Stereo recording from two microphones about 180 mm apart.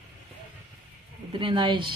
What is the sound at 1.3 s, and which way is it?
Speech, 25° right (ahead or behind).